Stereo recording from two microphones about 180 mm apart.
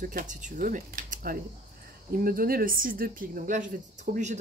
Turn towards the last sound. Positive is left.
turn(degrees=-45)  # may be behind; listen again after turning